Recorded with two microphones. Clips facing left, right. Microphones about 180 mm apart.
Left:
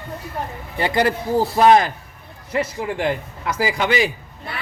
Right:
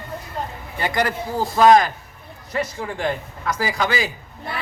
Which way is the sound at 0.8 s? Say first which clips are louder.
Left 3 dB; 25° left (ahead or behind).